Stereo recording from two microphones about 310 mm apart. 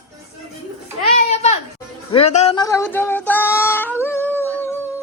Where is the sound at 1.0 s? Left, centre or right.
Left.